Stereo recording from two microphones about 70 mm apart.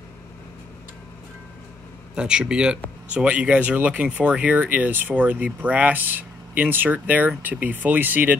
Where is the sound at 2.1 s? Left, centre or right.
Centre.